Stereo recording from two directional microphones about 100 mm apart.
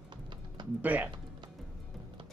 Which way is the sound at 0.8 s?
15° right (ahead or behind).